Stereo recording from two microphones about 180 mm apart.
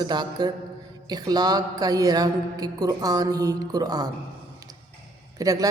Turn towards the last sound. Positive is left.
turn(degrees=-20)  # may be behind; listen again after turning